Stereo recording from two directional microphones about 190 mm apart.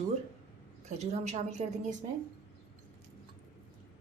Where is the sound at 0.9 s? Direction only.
35° right (ahead or behind).